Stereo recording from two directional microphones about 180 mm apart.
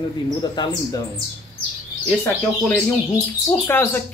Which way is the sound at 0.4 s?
25° left (ahead or behind).